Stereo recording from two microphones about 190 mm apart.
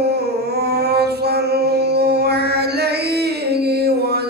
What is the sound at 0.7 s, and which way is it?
Mantra, 60° right (ahead or behind).